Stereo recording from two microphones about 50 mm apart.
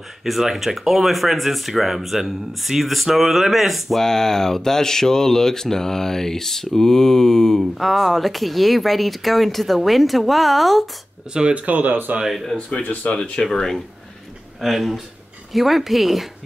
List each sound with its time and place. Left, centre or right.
0.2 s speech: centre
4.0 s speech: centre
11.3 s speech: right
12.5 s speech: centre
13.5 s speech: centre